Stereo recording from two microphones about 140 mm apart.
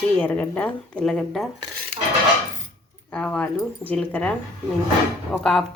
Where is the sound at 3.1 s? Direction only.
10° left (ahead or behind).